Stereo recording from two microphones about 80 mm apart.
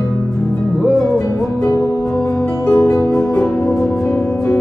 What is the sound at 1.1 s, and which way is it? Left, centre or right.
Music, left.